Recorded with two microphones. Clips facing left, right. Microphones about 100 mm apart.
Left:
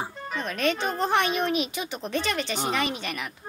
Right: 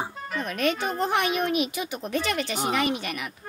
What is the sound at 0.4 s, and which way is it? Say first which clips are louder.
Speech: even; 25° left (ahead or behind).